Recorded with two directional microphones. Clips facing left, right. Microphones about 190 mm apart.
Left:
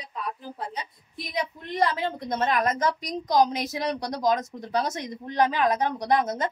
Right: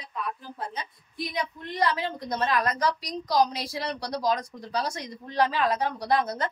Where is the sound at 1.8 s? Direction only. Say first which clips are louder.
Left 2 dB; 25° left (ahead or behind).